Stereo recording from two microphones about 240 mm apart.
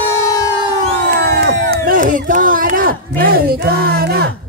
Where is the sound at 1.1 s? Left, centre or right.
Right.